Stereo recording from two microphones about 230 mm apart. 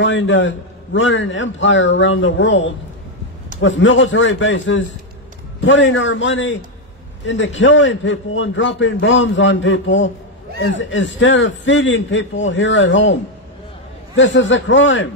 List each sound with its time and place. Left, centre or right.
0.0 s a man's voice: left